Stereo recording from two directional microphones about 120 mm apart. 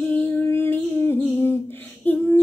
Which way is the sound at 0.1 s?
20° left (ahead or behind).